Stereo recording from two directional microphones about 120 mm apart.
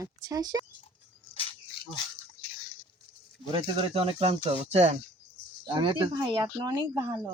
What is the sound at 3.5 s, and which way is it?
Speech, 45° right (ahead or behind).